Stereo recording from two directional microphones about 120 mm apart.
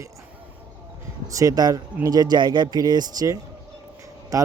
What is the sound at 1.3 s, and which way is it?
Speech, 30° right (ahead or behind).